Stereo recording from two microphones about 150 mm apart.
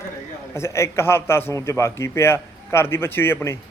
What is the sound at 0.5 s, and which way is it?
A man's voice, 20° left (ahead or behind).